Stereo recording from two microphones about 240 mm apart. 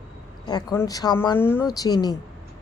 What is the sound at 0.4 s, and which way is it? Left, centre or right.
A woman's voice, centre.